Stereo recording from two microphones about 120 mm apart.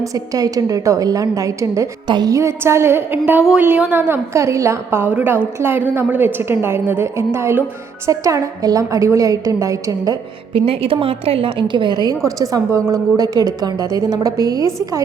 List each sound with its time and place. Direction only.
0.1 s a woman's voice: 30° right (ahead or behind)
10.5 s a woman's voice: 50° right (ahead or behind); by 14.7 s 30° right (ahead or behind)